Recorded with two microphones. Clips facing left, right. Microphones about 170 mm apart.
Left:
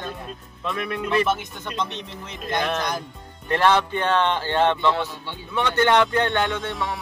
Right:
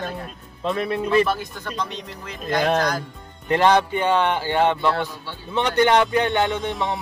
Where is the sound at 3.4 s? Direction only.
15° right (ahead or behind).